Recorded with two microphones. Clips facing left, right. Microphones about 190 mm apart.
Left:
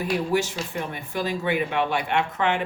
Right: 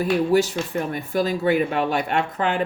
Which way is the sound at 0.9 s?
40° right (ahead or behind).